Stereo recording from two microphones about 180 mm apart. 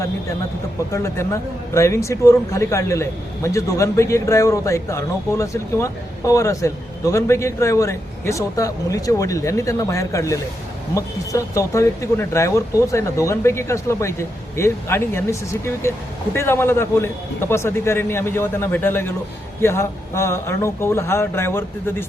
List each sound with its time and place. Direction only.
0.9 s speech: 15° left (ahead or behind)